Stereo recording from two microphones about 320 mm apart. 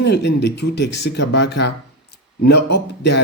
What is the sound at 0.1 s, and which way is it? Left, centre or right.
Speech, left.